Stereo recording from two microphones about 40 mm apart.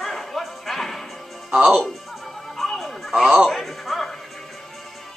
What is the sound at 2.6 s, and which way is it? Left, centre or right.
Music, centre.